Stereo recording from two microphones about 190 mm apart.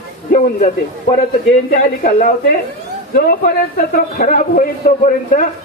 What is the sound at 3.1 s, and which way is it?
A man's voice, 50° left (ahead or behind).